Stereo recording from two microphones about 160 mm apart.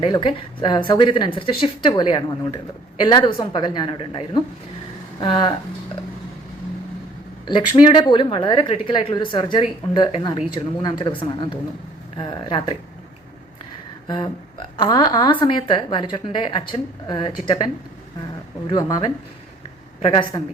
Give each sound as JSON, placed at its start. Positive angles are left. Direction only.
{"t": 0.0, "sound": "a woman's voice", "side_deg": 30}
{"t": 7.4, "sound": "a woman's voice", "side_deg": 30}
{"t": 14.1, "sound": "a woman's voice", "side_deg": 30}
{"t": 18.7, "sound": "a woman's voice", "side_deg": 25}